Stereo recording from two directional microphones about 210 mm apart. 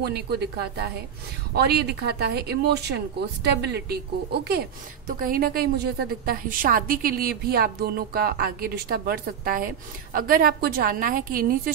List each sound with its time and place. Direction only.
0.0 s a woman's voice: 50° right (ahead or behind)